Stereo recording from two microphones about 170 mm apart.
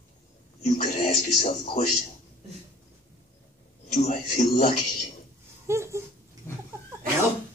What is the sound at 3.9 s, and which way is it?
Speech, 50° left (ahead or behind).